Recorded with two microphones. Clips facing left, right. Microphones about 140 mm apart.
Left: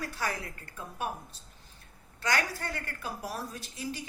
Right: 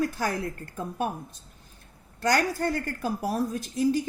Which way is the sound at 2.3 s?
45° right (ahead or behind).